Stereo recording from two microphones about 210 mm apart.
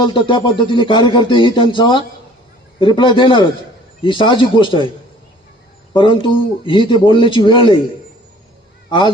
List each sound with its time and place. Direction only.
0.0 s speech: 25° left (ahead or behind)
5.9 s speech: 25° left (ahead or behind)
8.9 s speech: 25° left (ahead or behind)